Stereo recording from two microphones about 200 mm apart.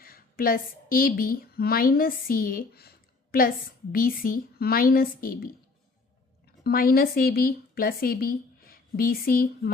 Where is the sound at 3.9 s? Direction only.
45° left (ahead or behind).